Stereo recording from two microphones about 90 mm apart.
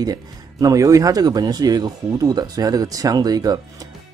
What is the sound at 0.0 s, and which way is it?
Speech, 45° right (ahead or behind).